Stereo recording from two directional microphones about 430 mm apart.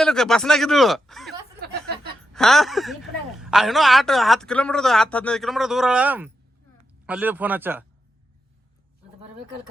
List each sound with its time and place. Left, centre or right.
0.0 s speech: centre
1.5 s a sound: right
2.3 s speech: centre